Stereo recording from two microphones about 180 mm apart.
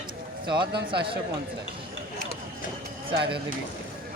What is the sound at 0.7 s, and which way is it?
Speech, 65° right (ahead or behind).